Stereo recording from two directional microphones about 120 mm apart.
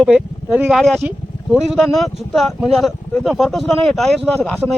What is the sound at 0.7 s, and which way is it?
Speech, 5° left (ahead or behind).